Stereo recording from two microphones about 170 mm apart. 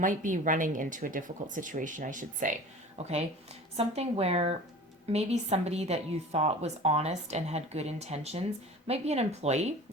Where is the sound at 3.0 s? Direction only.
40° right (ahead or behind).